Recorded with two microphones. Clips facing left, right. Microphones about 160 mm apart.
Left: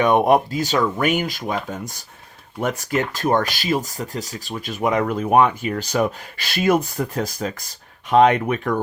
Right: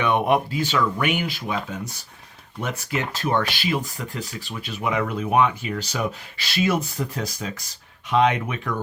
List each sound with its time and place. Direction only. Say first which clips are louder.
0.0 s speech: left 5 dB; 40° left (ahead or behind)